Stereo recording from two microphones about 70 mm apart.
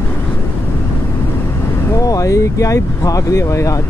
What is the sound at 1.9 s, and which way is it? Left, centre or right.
Speech, left.